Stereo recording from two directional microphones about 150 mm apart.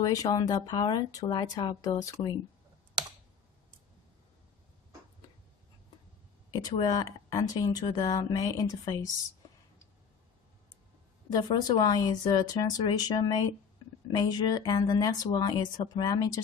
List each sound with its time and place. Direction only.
0.0 s speech: 25° left (ahead or behind)
6.5 s speech: 25° left (ahead or behind)
11.3 s speech: 25° left (ahead or behind)
14.1 s speech: 25° left (ahead or behind)